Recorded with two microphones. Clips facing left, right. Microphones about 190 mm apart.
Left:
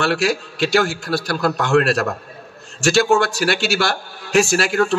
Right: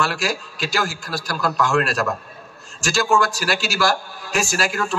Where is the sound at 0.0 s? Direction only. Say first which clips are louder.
Left 5 dB; 65° left (ahead or behind).